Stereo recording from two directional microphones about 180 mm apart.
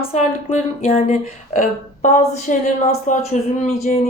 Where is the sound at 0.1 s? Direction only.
40° left (ahead or behind).